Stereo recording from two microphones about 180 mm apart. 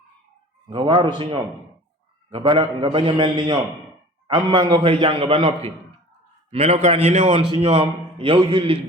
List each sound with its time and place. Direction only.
0.7 s a man's voice: 25° right (ahead or behind)